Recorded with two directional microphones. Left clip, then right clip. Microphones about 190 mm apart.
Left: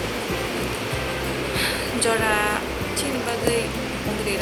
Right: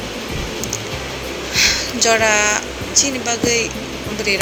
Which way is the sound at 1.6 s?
15° right (ahead or behind).